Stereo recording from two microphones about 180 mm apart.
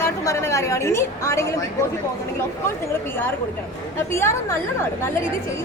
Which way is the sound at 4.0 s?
15° left (ahead or behind).